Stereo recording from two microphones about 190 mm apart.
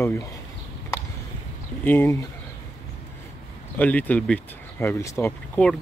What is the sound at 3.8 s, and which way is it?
Speech, 10° left (ahead or behind).